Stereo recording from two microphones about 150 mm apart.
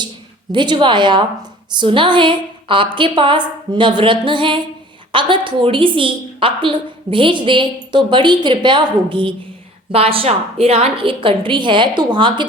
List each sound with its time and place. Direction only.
0.5 s a woman's voice: 30° right (ahead or behind)